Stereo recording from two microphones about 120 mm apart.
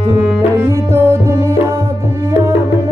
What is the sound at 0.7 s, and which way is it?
Music, 20° right (ahead or behind).